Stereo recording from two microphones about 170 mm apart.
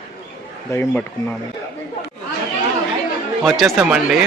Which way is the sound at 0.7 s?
15° left (ahead or behind).